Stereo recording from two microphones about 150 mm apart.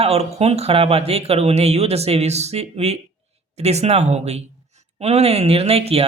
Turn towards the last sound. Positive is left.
turn(degrees=-40)  # may be behind; listen again after turning